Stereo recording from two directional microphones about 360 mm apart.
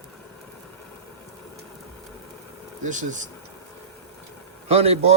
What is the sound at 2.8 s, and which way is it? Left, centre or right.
Speech, right.